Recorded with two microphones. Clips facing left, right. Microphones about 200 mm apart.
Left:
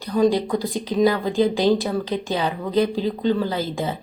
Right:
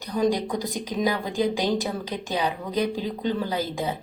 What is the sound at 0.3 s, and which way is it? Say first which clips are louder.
A woman's voice: left 4 dB; 15° right (ahead or behind).